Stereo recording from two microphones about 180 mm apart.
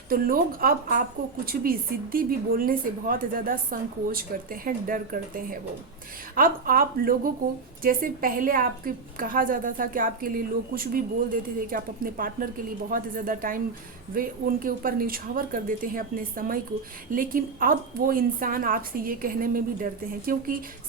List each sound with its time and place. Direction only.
0.1 s a woman's voice: 55° right (ahead or behind)